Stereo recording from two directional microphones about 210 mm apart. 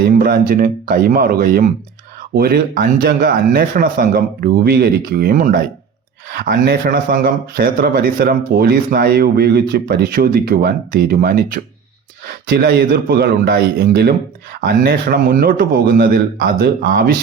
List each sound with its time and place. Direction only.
0.0 s speech: 45° right (ahead or behind)